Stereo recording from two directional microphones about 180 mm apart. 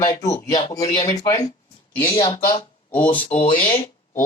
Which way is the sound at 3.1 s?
30° left (ahead or behind).